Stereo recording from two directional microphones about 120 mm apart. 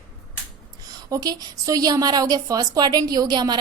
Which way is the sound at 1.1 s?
30° right (ahead or behind).